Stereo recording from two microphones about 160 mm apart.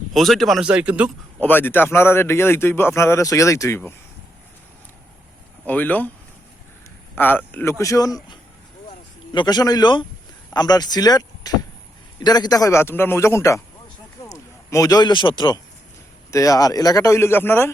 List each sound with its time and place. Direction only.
0.1 s speech: centre (ahead or behind)
1.4 s a man's voice: 10° left (ahead or behind)
5.6 s a man's voice: 10° left (ahead or behind)
7.2 s a man's voice: 10° left (ahead or behind)